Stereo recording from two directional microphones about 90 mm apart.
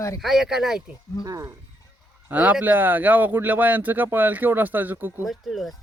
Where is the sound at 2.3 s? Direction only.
15° right (ahead or behind).